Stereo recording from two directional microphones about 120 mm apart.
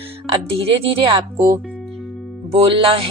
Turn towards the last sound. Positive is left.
turn(degrees=-50)  # may be behind; listen again after turning